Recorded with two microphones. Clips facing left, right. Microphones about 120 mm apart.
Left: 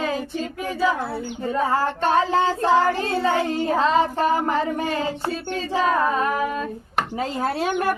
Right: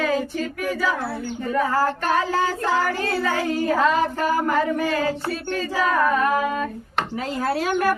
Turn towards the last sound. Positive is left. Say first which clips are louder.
# right 1 dB
turn(degrees=25)  # may be behind; listen again after turning